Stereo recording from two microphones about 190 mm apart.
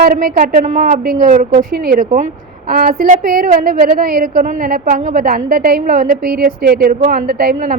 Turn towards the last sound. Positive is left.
turn(degrees=-50)  # may be behind; listen again after turning